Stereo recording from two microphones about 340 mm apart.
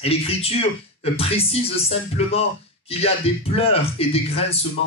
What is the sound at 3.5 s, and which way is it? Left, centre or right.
Speech, centre.